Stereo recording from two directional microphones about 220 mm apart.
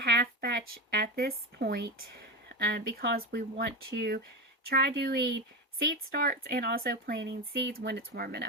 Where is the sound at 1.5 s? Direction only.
45° right (ahead or behind).